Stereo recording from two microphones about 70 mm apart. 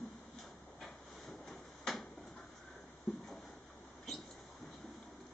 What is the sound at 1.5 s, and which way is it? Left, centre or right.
Drawer open or close, centre.